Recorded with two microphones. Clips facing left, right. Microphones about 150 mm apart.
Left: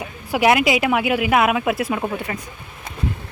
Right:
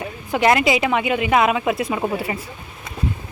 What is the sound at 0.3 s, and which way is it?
Speech, 10° left (ahead or behind).